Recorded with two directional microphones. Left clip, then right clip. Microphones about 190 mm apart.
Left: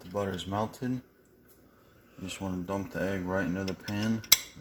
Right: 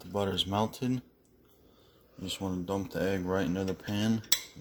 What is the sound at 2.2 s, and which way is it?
Speech, 10° right (ahead or behind).